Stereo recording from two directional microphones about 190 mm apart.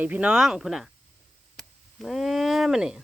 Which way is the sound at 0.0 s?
10° right (ahead or behind).